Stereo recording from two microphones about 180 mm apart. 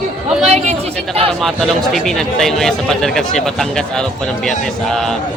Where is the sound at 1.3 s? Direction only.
Centre (ahead or behind).